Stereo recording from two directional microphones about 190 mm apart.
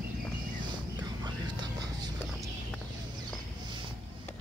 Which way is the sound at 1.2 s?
20° right (ahead or behind).